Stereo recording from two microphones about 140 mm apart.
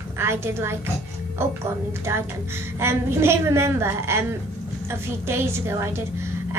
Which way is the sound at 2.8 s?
15° right (ahead or behind).